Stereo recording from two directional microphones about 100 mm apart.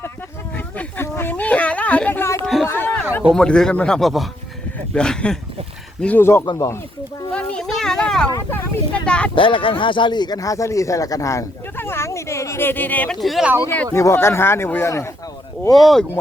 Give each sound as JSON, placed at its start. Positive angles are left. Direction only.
{"t": 0.5, "sound": "a sound", "side_deg": 20}
{"t": 3.3, "sound": "speech", "side_deg": 5}
{"t": 6.4, "sound": "speech", "side_deg": 45}
{"t": 7.3, "sound": "speech", "side_deg": 10}
{"t": 8.4, "sound": "vehicle", "side_deg": 20}
{"t": 9.0, "sound": "speech", "side_deg": 10}
{"t": 9.3, "sound": "speech", "side_deg": 60}
{"t": 13.1, "sound": "speech", "side_deg": 0}
{"t": 13.9, "sound": "speech", "side_deg": 25}
{"t": 15.7, "sound": "speech", "side_deg": 0}